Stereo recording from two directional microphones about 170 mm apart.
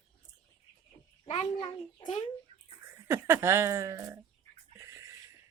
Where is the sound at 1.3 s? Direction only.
25° left (ahead or behind).